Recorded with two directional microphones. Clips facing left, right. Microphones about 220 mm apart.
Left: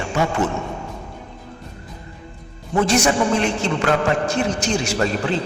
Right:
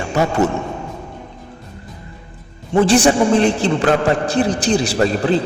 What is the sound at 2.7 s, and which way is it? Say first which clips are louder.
A man's voice: right 5 dB; 30° right (ahead or behind).